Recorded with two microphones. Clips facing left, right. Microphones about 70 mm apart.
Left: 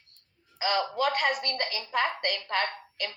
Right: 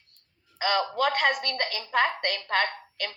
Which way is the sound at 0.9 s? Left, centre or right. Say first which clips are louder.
Right 2 dB; right.